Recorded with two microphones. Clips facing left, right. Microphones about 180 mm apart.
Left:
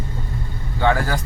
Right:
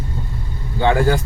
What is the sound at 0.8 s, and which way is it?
Speech, 25° right (ahead or behind).